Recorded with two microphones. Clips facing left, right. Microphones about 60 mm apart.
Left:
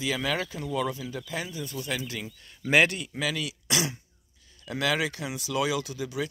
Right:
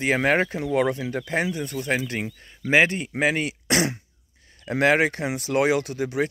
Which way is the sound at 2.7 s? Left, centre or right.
Right.